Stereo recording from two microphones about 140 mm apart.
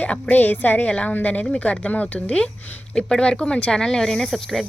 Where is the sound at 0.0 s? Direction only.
10° left (ahead or behind).